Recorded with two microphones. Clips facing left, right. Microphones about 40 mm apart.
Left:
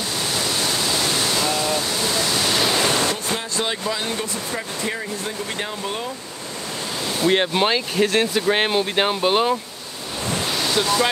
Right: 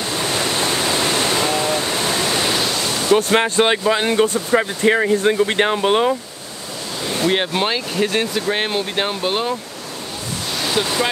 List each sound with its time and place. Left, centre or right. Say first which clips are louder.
0.0 s waterfall: right 3 dB; right
2.8 s waterfall: left 3 dB; left
3.1 s speech: right 10 dB; right
7.2 s speech: left 1 dB; centre
10.6 s speech: right 1 dB; centre